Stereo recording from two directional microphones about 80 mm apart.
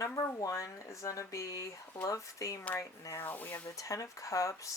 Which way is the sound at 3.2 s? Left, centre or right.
Left.